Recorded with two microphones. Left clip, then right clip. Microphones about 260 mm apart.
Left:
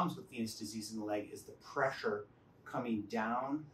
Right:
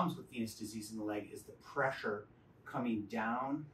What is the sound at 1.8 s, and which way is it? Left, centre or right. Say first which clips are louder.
Speech: left 1 dB; centre.